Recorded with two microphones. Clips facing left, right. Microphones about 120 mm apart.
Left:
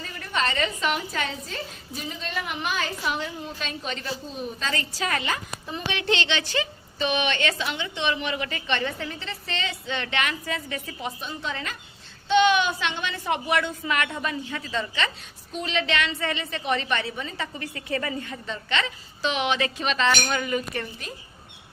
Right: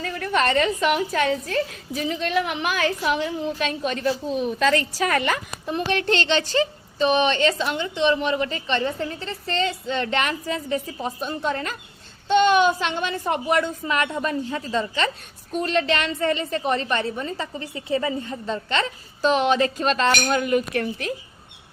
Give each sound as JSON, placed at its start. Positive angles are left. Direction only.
{"t": 0.0, "sound": "a woman's voice", "side_deg": -60}
{"t": 4.3, "sound": "a woman's voice", "side_deg": -75}
{"t": 5.9, "sound": "a woman's voice", "side_deg": -45}
{"t": 17.6, "sound": "a woman's voice", "side_deg": -20}
{"t": 18.3, "sound": "a woman's voice", "side_deg": -40}